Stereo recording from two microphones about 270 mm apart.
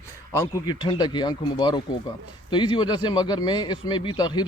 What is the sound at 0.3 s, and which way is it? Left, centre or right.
A man's voice, centre.